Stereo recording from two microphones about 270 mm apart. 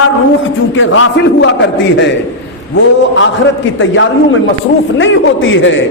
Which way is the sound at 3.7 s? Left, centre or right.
Left.